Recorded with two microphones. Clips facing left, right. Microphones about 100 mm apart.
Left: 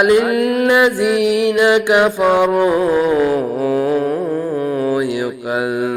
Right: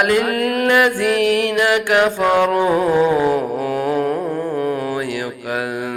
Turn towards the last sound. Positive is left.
turn(degrees=20)  # may be behind; listen again after turning